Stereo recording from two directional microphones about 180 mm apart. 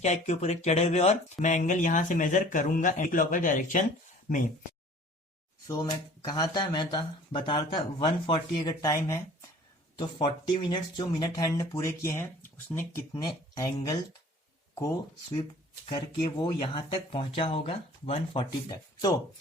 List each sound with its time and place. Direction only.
0.0 s speech: 40° left (ahead or behind)
5.6 s speech: 20° left (ahead or behind)
15.9 s speech: 25° left (ahead or behind)